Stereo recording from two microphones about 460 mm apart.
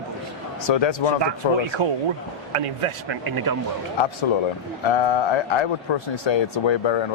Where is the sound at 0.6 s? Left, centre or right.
Left.